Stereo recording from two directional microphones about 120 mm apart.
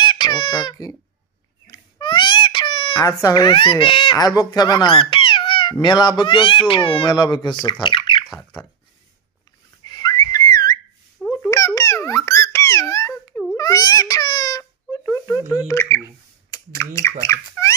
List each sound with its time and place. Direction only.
0.0 s crying: 40° left (ahead or behind)
1.7 s baby cry: 40° left (ahead or behind)
4.4 s speech: 35° left (ahead or behind)
7.8 s a sound: 45° left (ahead or behind)
9.8 s whistling: 35° left (ahead or behind)
11.2 s a sound: 10° left (ahead or behind)
11.5 s babbling: 25° left (ahead or behind)
13.6 s baby cry: 30° left (ahead or behind)
15.0 s a sound: 20° left (ahead or behind)
17.2 s squeak: 25° left (ahead or behind)